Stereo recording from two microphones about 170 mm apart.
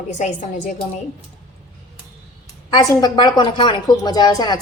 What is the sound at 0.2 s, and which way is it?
Speech, 45° left (ahead or behind).